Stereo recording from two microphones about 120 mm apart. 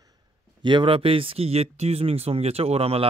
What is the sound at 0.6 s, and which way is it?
Speech, 45° right (ahead or behind).